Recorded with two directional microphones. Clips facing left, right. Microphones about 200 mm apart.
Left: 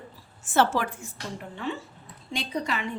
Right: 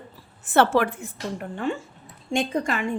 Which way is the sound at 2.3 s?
45° right (ahead or behind).